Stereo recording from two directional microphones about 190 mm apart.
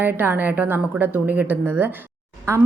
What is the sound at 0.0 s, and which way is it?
A woman's voice, 10° right (ahead or behind).